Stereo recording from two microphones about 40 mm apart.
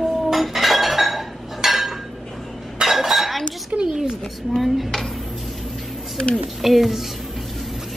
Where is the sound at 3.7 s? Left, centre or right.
Right.